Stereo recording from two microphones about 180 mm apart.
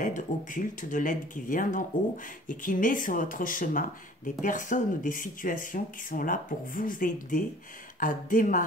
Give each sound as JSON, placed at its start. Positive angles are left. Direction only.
{"t": 0.0, "sound": "speech", "side_deg": 45}